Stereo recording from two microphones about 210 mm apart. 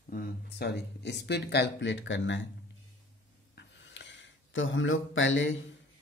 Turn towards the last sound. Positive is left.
turn(degrees=65)  # may be behind; listen again after turning